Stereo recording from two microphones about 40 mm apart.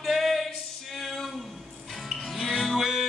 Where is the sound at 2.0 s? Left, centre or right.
Centre.